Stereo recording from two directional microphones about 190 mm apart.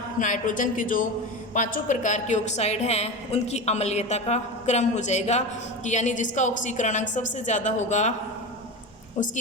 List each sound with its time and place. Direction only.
0.2 s a woman's voice: 45° left (ahead or behind)
9.2 s a woman's voice: 40° left (ahead or behind)